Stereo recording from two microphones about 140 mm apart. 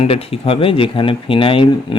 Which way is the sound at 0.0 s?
45° left (ahead or behind).